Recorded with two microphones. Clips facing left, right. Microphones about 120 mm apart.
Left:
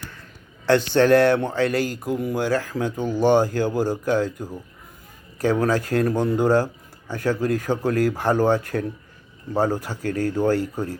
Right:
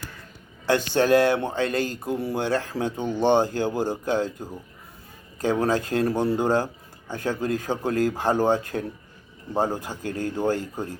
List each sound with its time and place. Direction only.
0.6 s speech: 15° right (ahead or behind)
9.6 s speech: 15° right (ahead or behind)